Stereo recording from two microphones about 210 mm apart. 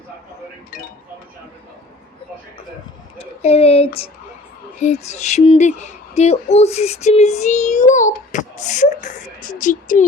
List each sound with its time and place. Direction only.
3.2 s speech: 30° left (ahead or behind)